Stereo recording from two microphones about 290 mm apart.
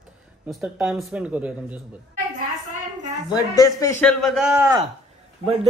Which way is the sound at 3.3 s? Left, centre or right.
Centre.